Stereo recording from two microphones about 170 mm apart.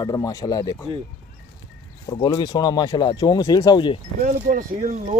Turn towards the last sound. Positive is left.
turn(degrees=-55)  # may be behind; listen again after turning